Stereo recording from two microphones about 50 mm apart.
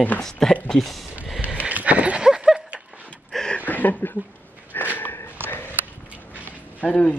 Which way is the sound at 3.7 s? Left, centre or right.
Left.